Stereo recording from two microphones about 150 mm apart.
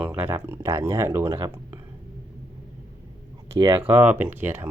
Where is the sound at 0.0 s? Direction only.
15° right (ahead or behind).